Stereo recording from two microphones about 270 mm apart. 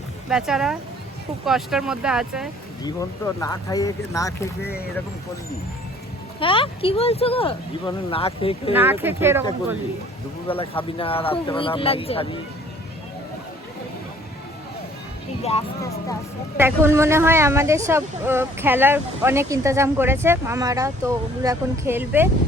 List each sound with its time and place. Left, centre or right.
0.3 s speech: centre
2.8 s speech: centre
6.4 s speech: centre
8.7 s speech: centre
10.6 s speech: centre
15.4 s speech: centre
16.6 s speech: centre